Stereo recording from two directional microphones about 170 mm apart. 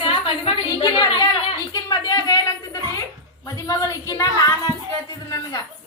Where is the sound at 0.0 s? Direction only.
30° left (ahead or behind).